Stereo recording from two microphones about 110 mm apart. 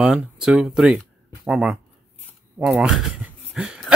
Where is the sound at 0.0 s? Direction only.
10° right (ahead or behind).